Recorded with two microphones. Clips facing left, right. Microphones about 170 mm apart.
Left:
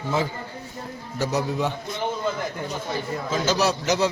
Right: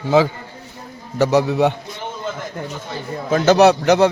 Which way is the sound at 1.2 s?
70° right (ahead or behind).